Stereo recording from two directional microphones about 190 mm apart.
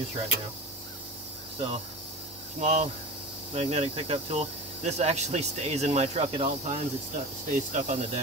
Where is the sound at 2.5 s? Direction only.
40° right (ahead or behind).